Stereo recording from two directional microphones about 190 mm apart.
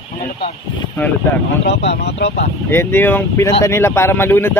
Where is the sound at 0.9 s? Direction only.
10° left (ahead or behind).